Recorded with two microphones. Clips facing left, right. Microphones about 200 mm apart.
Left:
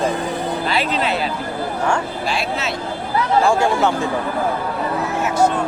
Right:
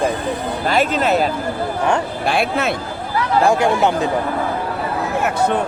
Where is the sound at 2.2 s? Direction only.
55° right (ahead or behind).